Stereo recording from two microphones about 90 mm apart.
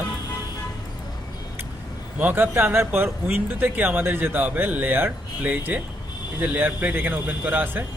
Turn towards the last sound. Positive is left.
turn(degrees=-20)  # may be behind; listen again after turning